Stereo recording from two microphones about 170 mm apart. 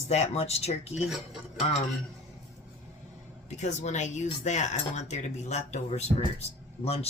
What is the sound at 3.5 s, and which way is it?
Speech, 45° left (ahead or behind).